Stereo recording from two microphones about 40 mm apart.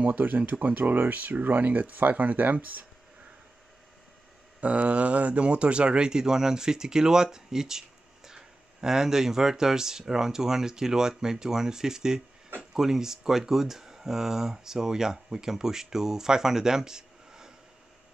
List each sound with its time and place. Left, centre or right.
0.0 s speech: right
4.6 s speech: right; by 17.5 s centre